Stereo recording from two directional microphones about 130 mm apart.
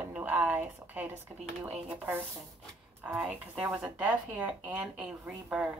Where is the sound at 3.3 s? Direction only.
10° right (ahead or behind).